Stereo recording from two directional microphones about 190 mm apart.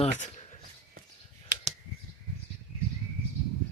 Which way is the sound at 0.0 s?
35° left (ahead or behind).